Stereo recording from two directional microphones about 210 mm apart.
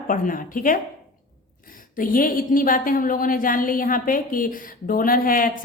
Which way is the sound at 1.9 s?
40° left (ahead or behind).